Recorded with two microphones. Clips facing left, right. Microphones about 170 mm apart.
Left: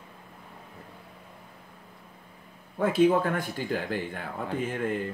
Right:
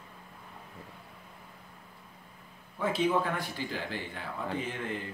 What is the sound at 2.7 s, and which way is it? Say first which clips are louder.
Speech: left 6 dB; 50° left (ahead or behind).